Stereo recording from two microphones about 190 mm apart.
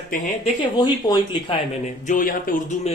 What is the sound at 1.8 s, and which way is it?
Speech, 40° left (ahead or behind).